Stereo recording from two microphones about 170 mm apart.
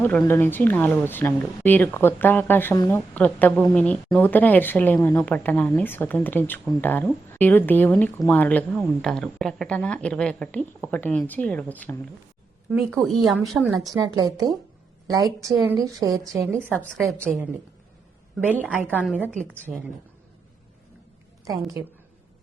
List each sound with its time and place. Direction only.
0.0 s a woman's voice: 15° left (ahead or behind)
13.8 s a woman's voice: 20° right (ahead or behind)
16.5 s a woman's voice: 5° left (ahead or behind)
18.3 s a woman's voice: 10° right (ahead or behind)